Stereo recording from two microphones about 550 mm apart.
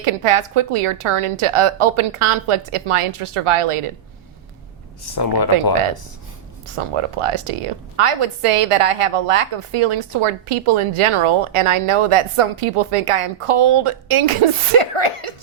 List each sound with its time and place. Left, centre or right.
0.0 s a woman's voice: right
5.5 s a woman's voice: right
6.7 s a woman's voice: right